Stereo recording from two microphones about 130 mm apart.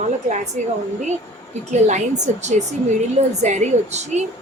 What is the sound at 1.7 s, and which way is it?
A woman's voice, 65° right (ahead or behind).